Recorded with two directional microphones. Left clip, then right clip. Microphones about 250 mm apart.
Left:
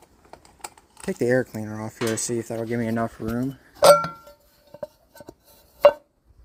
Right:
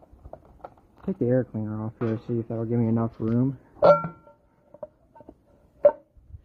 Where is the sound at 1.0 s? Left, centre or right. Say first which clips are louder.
Left 3 dB; centre.